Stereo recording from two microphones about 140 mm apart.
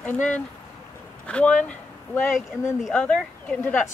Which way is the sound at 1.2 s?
10° left (ahead or behind).